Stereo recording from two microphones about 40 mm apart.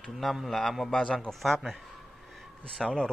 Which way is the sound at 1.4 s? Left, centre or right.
Centre.